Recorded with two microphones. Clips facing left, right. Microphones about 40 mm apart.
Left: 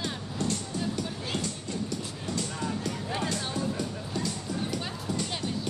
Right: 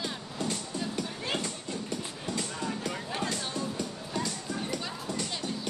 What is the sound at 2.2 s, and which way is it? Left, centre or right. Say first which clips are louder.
Music: left 1 dB; centre.